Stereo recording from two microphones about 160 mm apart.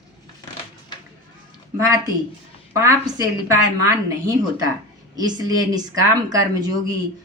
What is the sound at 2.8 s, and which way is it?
Speech, 20° right (ahead or behind).